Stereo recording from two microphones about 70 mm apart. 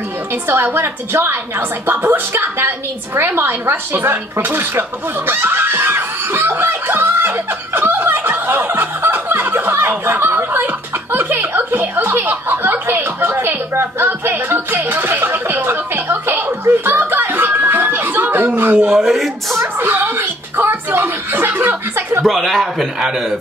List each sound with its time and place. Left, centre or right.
0.3 s speech: right
3.2 s a sound: right
18.8 s speech: centre
19.6 s speech: right
22.2 s speech: centre
22.9 s a man's voice: centre